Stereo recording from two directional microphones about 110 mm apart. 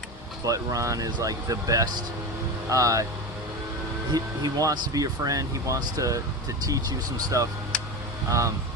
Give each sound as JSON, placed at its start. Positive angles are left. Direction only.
{"t": 0.4, "sound": "speech", "side_deg": -30}
{"t": 4.1, "sound": "speech", "side_deg": -35}